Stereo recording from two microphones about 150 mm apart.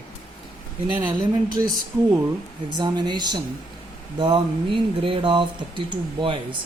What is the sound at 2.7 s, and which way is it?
Speech, 30° right (ahead or behind).